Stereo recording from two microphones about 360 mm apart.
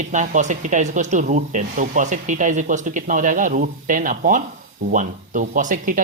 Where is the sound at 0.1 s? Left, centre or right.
Centre.